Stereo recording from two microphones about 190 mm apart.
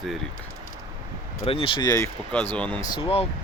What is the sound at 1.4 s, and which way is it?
Speech, 30° left (ahead or behind).